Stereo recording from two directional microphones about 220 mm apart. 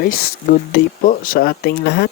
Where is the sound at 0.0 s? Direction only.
40° left (ahead or behind).